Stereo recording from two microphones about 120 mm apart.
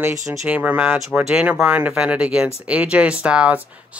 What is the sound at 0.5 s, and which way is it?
Speech, 15° right (ahead or behind).